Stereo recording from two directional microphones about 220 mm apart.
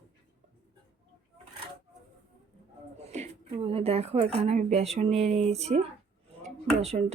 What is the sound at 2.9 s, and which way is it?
Speech, 30° right (ahead or behind).